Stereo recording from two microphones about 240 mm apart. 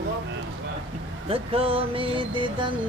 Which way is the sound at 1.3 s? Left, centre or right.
Right.